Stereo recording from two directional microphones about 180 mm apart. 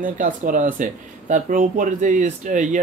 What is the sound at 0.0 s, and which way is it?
Speech, 45° right (ahead or behind).